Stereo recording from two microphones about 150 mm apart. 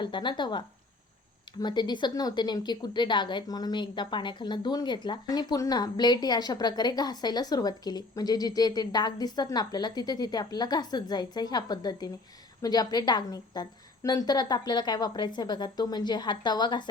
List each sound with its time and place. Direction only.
0.0 s speech: 30° left (ahead or behind)